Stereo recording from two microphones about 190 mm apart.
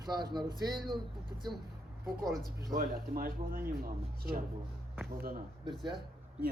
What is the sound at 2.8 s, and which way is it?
Speech, 50° right (ahead or behind).